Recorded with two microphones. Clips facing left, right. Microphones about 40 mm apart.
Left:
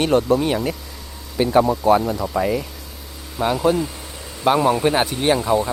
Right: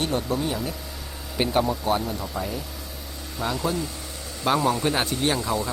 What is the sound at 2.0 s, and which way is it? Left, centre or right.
Speech, left.